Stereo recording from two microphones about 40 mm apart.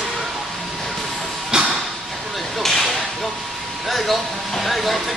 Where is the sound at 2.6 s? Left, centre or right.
Centre.